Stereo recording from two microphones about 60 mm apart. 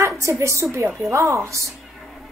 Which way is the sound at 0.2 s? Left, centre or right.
Right.